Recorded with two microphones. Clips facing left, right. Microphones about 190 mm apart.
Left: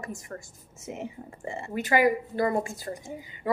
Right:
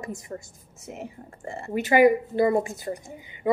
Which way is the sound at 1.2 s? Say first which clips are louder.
Left 2 dB; 10° left (ahead or behind).